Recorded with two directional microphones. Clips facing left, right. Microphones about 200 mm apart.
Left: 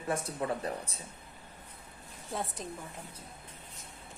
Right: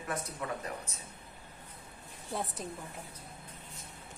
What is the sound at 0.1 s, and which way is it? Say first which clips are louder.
Speech: left 5 dB; 30° left (ahead or behind).